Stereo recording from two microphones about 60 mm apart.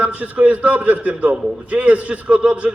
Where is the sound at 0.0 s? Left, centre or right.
Right.